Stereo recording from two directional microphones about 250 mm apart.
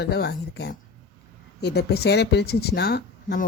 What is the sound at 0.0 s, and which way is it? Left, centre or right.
Speech, left.